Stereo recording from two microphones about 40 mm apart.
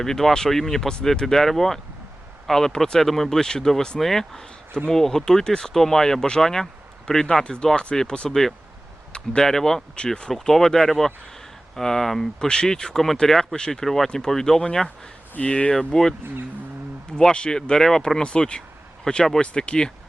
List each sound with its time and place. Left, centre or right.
0.0 s speech: centre
3.0 s speech: centre
7.4 s speech: left
8.3 s speech: centre
15.4 s speech: left
15.7 s speech: centre
18.2 s speech: left
19.0 s speech: centre
19.4 s speech: left